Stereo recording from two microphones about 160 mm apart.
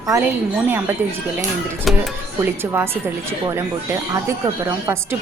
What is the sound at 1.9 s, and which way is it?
Speech, centre (ahead or behind).